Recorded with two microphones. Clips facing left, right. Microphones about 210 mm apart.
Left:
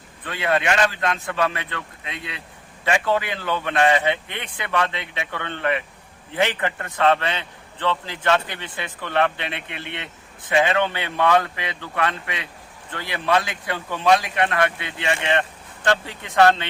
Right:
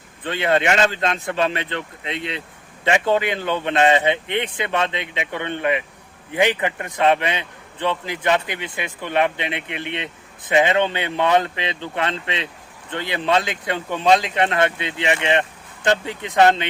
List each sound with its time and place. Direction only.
0.3 s a man's voice: 25° right (ahead or behind)